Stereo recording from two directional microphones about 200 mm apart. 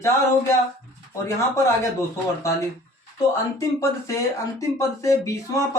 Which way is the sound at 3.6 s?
15° left (ahead or behind).